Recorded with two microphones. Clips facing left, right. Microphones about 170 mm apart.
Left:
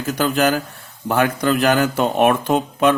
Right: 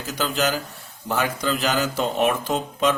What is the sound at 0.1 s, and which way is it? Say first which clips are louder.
Speech: left 6 dB; 55° left (ahead or behind).